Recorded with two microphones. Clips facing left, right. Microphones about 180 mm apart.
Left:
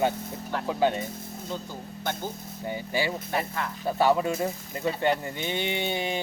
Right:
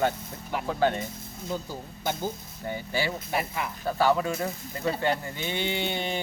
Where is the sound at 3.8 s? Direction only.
20° left (ahead or behind).